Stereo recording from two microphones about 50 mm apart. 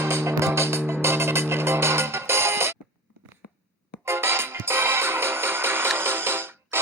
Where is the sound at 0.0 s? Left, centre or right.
Right.